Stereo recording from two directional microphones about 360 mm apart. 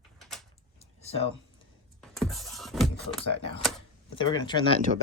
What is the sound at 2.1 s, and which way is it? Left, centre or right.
Music, centre.